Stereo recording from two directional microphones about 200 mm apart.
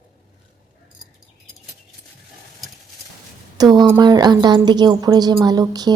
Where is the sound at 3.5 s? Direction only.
20° right (ahead or behind).